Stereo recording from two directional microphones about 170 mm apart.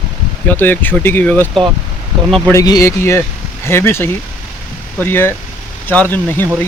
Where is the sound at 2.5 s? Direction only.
20° left (ahead or behind).